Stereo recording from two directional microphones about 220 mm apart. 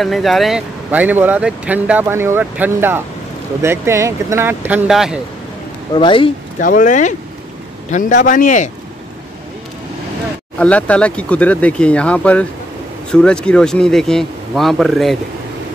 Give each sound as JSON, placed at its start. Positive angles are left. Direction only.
{"t": 0.0, "sound": "speech", "side_deg": 0}
{"t": 5.9, "sound": "speech", "side_deg": 25}
{"t": 6.6, "sound": "a man's voice", "side_deg": 35}
{"t": 10.6, "sound": "speech", "side_deg": 5}